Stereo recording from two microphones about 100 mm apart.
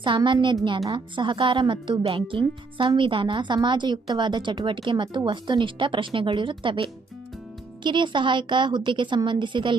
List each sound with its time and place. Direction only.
0.1 s a woman's voice: 55° right (ahead or behind)